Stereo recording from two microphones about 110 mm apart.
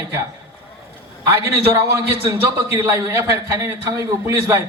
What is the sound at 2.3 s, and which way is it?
A man's voice, 25° right (ahead or behind).